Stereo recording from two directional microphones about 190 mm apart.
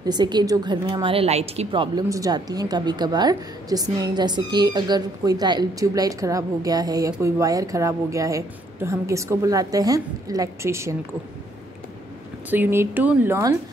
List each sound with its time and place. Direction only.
0.0 s speech: 20° right (ahead or behind)
12.4 s a woman's voice: 10° right (ahead or behind)